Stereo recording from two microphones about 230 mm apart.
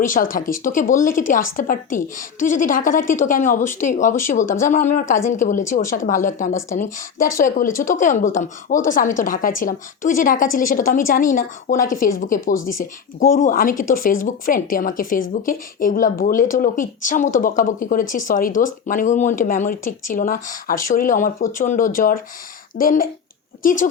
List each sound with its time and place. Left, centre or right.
0.0 s speech: left